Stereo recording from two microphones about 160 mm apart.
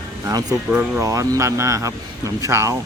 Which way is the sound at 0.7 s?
15° right (ahead or behind).